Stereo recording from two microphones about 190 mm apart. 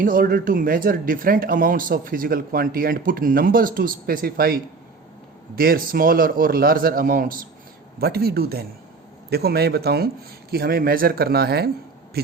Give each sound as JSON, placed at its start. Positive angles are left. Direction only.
{"t": 0.0, "sound": "speech", "side_deg": -50}